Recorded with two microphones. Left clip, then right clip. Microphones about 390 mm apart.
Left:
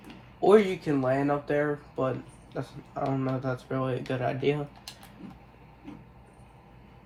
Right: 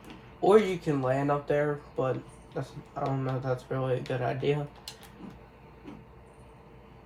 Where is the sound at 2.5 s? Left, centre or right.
Centre.